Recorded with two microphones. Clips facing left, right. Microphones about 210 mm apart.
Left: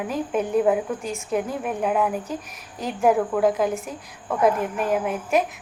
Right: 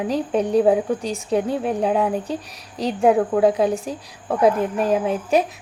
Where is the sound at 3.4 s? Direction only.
30° right (ahead or behind).